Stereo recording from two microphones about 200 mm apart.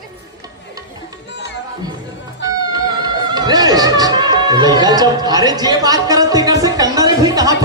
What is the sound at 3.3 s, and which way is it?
Music, 20° right (ahead or behind).